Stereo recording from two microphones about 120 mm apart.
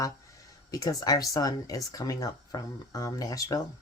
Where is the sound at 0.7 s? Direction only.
30° left (ahead or behind).